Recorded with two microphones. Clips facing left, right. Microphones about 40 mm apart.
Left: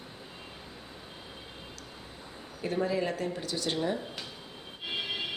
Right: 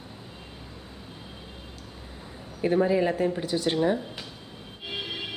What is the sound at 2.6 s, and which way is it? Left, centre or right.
Speech, right.